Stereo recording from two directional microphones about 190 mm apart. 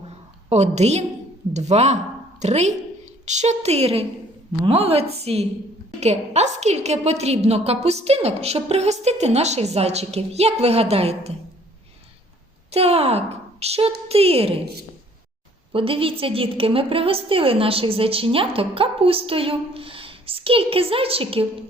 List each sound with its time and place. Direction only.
0.5 s a woman's voice: 35° right (ahead or behind)
12.7 s a woman's voice: 30° right (ahead or behind)
15.7 s a woman's voice: 30° right (ahead or behind)